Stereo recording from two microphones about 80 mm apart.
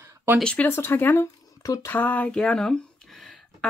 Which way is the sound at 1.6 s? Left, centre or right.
Left.